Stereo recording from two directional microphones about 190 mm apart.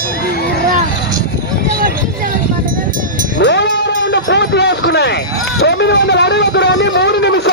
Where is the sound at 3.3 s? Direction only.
65° left (ahead or behind).